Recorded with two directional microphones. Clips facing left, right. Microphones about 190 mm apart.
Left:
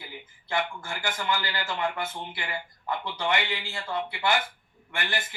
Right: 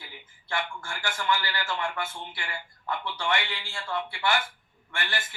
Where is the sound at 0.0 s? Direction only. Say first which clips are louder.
Left 5 dB; 20° left (ahead or behind).